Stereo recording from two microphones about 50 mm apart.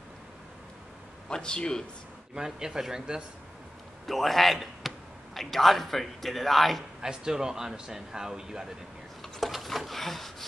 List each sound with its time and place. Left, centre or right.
1.3 s a man's voice: centre
2.3 s speech: centre
4.0 s a man's voice: centre
7.0 s speech: centre
9.2 s a sound: centre